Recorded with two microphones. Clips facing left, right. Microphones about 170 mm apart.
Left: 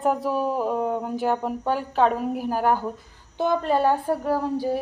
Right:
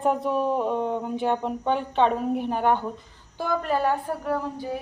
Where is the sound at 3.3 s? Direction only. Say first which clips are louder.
Left 3 dB; 25° left (ahead or behind).